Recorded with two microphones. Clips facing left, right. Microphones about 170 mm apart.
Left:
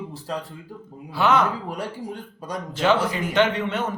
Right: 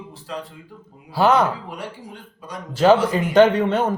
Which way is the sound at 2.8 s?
40° right (ahead or behind).